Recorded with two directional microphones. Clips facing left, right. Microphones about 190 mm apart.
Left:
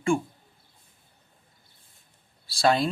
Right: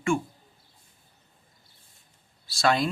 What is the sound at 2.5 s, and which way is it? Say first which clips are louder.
Speech: left 1 dB; 30° left (ahead or behind).